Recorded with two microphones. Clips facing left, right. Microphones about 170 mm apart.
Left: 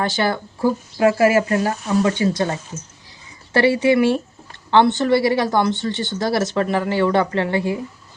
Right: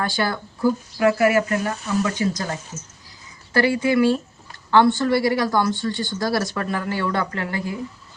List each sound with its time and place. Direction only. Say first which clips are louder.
0.0 s speech: left 3 dB; 25° left (ahead or behind)
3.5 s speech: left 3 dB; 25° left (ahead or behind)